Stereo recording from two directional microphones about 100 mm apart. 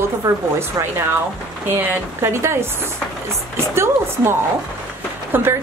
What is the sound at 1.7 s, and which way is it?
Speech, 20° right (ahead or behind).